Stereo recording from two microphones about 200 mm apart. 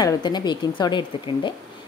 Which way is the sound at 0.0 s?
20° left (ahead or behind).